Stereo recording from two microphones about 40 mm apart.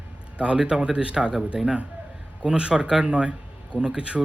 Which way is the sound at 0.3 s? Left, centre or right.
Right.